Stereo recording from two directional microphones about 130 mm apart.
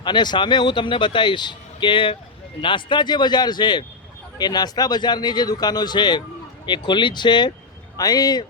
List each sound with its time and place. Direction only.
0.0 s speech: 35° left (ahead or behind)